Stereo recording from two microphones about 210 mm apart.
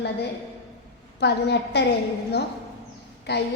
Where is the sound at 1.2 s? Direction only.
55° left (ahead or behind).